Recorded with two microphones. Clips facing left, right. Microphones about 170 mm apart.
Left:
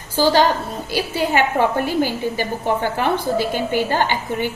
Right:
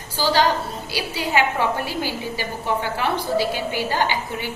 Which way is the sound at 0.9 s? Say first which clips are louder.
Left 7 dB; 50° left (ahead or behind).